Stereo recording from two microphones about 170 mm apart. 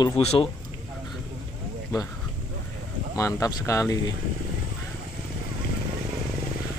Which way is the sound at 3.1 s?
20° left (ahead or behind).